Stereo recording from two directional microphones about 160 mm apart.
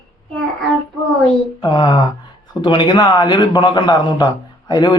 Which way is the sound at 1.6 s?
30° left (ahead or behind).